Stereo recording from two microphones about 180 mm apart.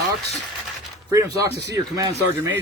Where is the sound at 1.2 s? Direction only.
65° right (ahead or behind).